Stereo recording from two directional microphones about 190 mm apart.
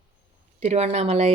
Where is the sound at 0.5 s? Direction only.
35° right (ahead or behind).